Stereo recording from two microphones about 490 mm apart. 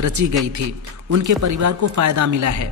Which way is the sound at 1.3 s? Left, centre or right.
Right.